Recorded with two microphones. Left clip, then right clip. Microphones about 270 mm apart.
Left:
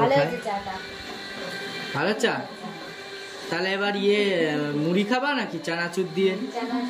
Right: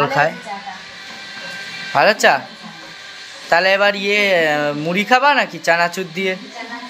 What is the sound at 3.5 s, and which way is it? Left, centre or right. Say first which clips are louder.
Speech: right 12 dB; centre.